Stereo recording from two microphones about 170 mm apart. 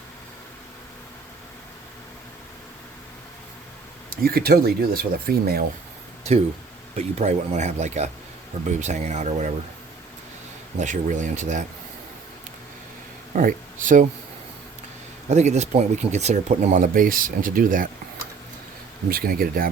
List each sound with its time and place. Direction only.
4.1 s speech: 60° right (ahead or behind)
6.9 s speech: 40° right (ahead or behind)
10.8 s speech: 45° right (ahead or behind)
13.3 s speech: 50° right (ahead or behind)
15.3 s speech: 40° right (ahead or behind)
19.0 s speech: 60° right (ahead or behind)